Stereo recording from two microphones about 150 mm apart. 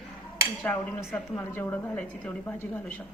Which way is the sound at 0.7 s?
10° left (ahead or behind).